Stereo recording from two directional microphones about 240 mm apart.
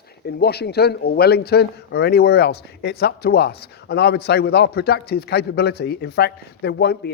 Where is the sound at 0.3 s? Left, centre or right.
Left.